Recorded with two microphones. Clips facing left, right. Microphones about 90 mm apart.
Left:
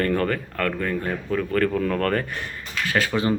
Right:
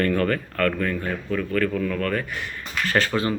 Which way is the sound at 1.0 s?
30° left (ahead or behind).